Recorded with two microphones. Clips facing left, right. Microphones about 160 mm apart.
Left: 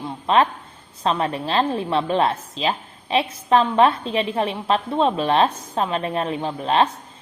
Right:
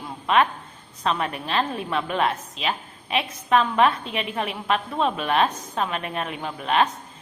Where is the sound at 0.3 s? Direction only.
30° left (ahead or behind).